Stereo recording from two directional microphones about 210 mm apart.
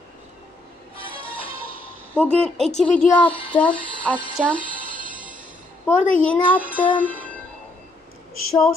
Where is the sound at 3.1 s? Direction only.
5° left (ahead or behind).